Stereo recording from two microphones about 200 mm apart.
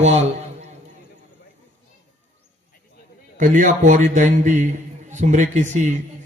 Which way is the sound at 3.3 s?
40° right (ahead or behind).